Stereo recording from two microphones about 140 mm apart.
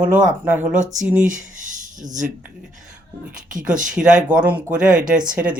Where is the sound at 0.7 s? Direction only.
60° right (ahead or behind).